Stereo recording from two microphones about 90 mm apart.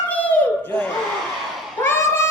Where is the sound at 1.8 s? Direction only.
30° left (ahead or behind).